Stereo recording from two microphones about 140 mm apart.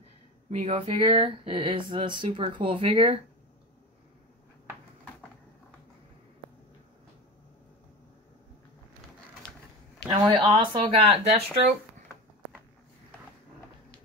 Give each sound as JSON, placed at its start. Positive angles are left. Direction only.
{"t": 0.5, "sound": "speech", "side_deg": -50}
{"t": 10.0, "sound": "speech", "side_deg": -30}